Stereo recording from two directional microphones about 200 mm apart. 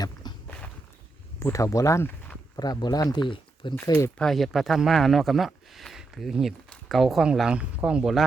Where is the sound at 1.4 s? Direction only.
15° left (ahead or behind).